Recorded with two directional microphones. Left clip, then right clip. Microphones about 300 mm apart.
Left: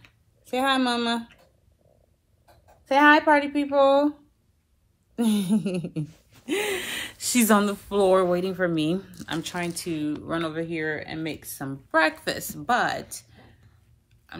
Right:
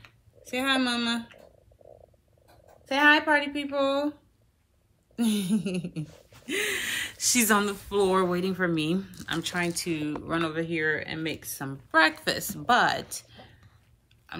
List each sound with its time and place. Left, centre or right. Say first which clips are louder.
0.5 s speech: left 3 dB; centre
2.8 s speech: left 4 dB; centre
5.1 s speech: left 3 dB; centre